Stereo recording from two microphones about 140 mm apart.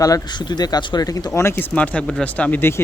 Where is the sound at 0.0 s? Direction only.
30° left (ahead or behind).